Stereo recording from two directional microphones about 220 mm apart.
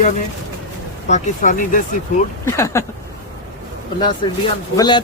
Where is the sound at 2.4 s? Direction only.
10° left (ahead or behind).